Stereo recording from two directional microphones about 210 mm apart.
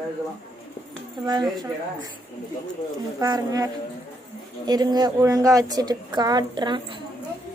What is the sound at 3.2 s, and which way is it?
A woman's voice, 15° right (ahead or behind).